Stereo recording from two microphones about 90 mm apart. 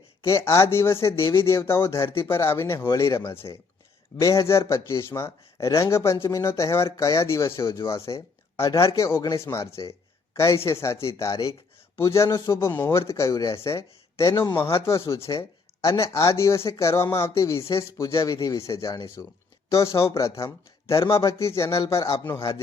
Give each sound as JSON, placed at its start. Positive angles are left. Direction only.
{"t": 0.2, "sound": "speech", "side_deg": 35}
{"t": 20.9, "sound": "speech", "side_deg": 45}